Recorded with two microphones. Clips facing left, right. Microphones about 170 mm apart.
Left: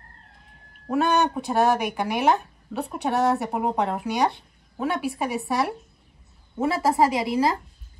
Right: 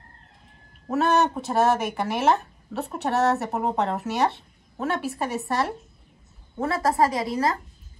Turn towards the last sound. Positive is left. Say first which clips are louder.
# left 2 dB
turn(degrees=10)  # may be behind; listen again after turning